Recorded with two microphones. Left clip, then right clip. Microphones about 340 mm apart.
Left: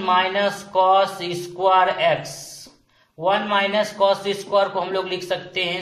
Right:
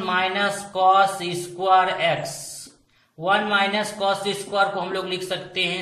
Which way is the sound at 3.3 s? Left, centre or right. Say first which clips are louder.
Left 1 dB; centre.